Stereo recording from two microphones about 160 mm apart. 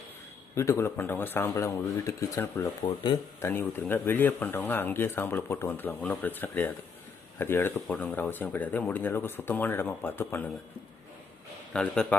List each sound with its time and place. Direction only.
0.5 s speech: 15° left (ahead or behind)
3.5 s speech: 15° left (ahead or behind)
11.7 s a man's voice: 5° left (ahead or behind)